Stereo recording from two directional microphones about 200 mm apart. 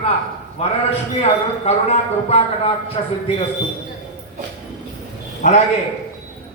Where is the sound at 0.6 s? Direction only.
30° left (ahead or behind).